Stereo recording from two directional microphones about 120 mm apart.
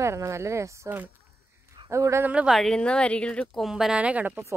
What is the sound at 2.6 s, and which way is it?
Speech, 5° left (ahead or behind).